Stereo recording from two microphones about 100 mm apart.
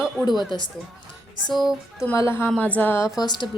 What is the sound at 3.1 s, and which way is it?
Speech, 45° left (ahead or behind).